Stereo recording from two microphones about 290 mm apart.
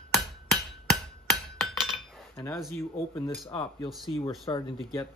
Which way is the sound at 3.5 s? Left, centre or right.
Centre.